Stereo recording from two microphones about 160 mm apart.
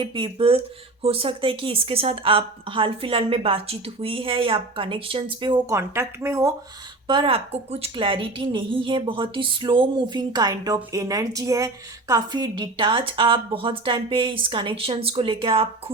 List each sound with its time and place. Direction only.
0.0 s a woman's voice: 30° right (ahead or behind); by 6.5 s 15° right (ahead or behind)
7.1 s a woman's voice: 35° right (ahead or behind)